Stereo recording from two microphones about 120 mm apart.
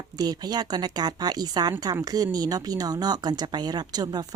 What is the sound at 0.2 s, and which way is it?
Speech, 35° right (ahead or behind).